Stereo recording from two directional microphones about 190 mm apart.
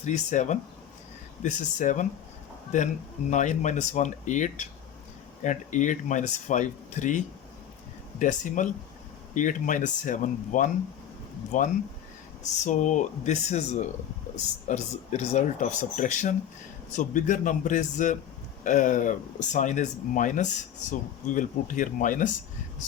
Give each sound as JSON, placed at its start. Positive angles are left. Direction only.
{"t": 0.0, "sound": "speech", "side_deg": 40}
{"t": 12.4, "sound": "speech", "side_deg": 40}